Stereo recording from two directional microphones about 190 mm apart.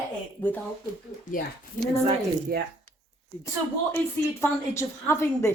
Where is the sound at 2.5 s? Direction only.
55° right (ahead or behind).